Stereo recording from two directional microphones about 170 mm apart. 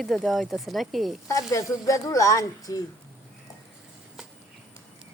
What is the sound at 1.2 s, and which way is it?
Speech, 20° left (ahead or behind).